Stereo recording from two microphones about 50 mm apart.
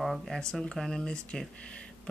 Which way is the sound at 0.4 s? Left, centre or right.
Centre.